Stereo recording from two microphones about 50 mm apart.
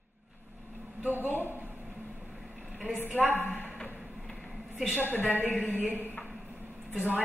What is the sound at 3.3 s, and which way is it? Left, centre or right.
Speech, left.